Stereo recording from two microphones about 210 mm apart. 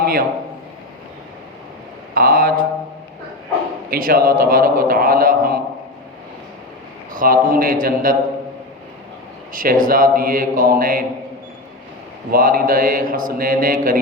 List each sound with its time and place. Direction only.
0.0 s a sound: 45° right (ahead or behind)
2.1 s a man's voice: 45° right (ahead or behind)
3.8 s a man's voice: 45° right (ahead or behind)
7.1 s a man's voice: 40° right (ahead or behind)
9.5 s a man's voice: 40° right (ahead or behind)
12.3 s a man's voice: 45° right (ahead or behind)